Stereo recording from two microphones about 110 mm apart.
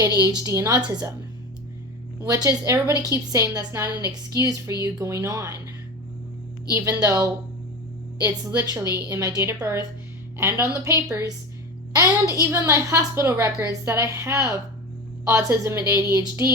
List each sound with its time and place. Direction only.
0.0 s a woman's voice: 35° right (ahead or behind)
2.2 s a woman's voice: 30° right (ahead or behind)
6.7 s a woman's voice: 30° right (ahead or behind)